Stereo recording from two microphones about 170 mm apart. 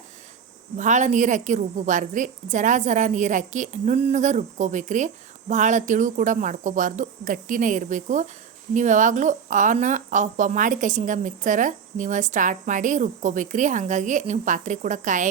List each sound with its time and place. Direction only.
0.8 s a woman's voice: 45° right (ahead or behind)